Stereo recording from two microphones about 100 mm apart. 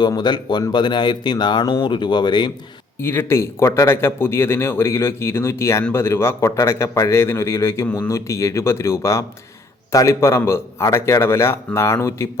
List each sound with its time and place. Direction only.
0.0 s speech: 45° left (ahead or behind)
3.0 s speech: 20° left (ahead or behind)